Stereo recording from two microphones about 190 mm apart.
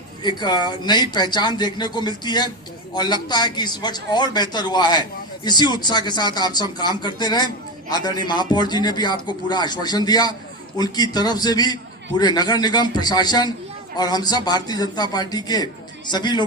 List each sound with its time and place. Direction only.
0.2 s speech: 25° left (ahead or behind)